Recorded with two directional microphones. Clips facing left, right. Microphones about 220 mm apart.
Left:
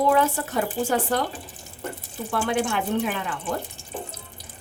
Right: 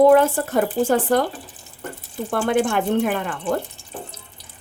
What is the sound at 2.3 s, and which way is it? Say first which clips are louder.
Speech: right 5 dB; 50° right (ahead or behind).